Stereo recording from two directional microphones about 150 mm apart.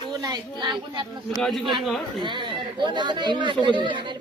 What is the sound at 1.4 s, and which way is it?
Speech, centre (ahead or behind).